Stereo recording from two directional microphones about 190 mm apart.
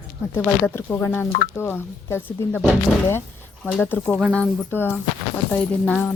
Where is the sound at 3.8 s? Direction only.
10° left (ahead or behind).